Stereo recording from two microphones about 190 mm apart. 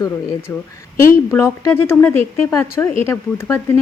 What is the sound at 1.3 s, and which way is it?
Speech, 15° left (ahead or behind).